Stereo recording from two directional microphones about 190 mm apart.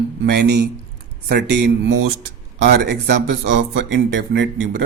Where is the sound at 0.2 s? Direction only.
60° right (ahead or behind).